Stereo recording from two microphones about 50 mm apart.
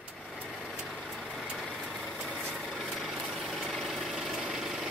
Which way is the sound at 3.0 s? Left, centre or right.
Centre.